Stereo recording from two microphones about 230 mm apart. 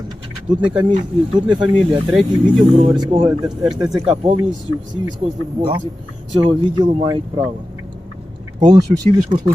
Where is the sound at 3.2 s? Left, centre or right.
Centre.